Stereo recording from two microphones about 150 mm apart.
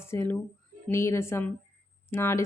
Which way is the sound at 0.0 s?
15° left (ahead or behind).